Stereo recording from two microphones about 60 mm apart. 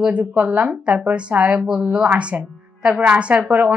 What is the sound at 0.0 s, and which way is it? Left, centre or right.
A woman's voice, right.